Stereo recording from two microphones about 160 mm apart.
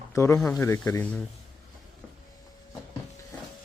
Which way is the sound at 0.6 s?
15° left (ahead or behind).